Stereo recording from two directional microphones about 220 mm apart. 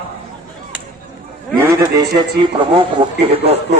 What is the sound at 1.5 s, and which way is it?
A man's voice, 15° right (ahead or behind).